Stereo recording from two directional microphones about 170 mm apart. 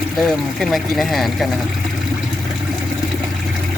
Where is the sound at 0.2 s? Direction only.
Centre (ahead or behind).